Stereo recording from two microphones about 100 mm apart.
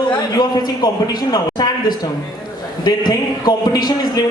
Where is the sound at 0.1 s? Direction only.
40° left (ahead or behind).